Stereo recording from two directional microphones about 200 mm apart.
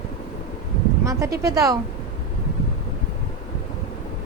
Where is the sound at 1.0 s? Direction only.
15° right (ahead or behind).